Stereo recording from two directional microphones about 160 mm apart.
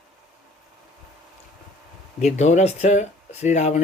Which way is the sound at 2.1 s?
45° left (ahead or behind).